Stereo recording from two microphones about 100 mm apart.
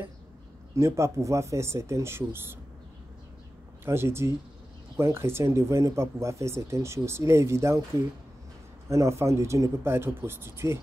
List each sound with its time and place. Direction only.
0.7 s speech: 30° right (ahead or behind)
3.8 s speech: 25° right (ahead or behind)